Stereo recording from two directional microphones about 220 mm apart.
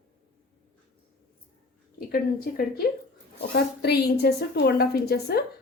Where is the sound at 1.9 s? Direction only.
40° left (ahead or behind).